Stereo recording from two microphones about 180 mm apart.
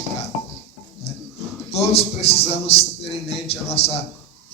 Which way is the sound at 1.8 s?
35° left (ahead or behind).